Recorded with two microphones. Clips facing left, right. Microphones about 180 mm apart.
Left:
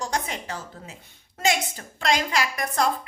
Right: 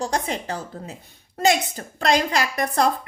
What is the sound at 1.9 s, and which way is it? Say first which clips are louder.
Speech: right 3 dB; 40° right (ahead or behind).